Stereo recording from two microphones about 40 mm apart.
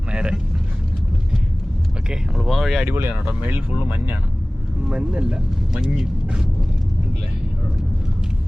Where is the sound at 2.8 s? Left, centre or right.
Right.